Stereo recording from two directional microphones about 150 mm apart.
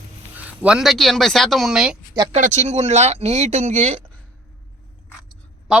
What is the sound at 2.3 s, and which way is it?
Speech, 50° right (ahead or behind).